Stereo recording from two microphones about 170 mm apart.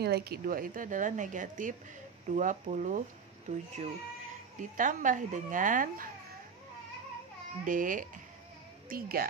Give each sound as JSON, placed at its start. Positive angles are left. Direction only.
{"t": 0.0, "sound": "speech", "side_deg": -70}
{"t": 7.6, "sound": "speech", "side_deg": -50}